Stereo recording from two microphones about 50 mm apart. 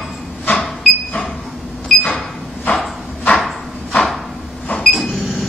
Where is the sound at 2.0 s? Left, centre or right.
Left.